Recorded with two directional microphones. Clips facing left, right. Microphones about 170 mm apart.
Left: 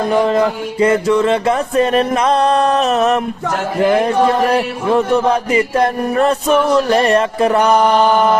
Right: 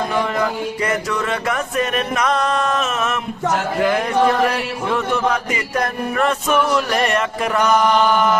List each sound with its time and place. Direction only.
0.1 s mantra: 30° left (ahead or behind)
3.8 s chant: 30° left (ahead or behind)
4.5 s mantra: 35° left (ahead or behind)